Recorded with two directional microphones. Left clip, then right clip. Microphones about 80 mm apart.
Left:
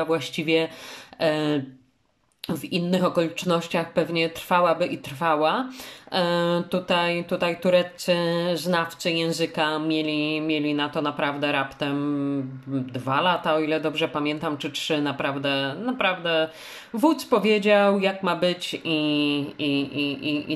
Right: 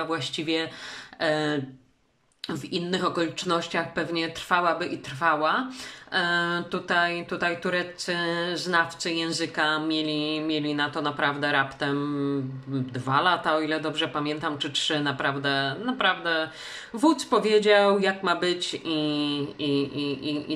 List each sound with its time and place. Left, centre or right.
0.1 s speech: left